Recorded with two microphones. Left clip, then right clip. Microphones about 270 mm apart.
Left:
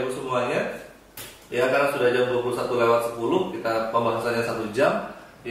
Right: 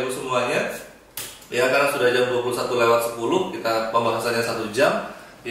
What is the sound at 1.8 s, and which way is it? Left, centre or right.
A man's voice, centre.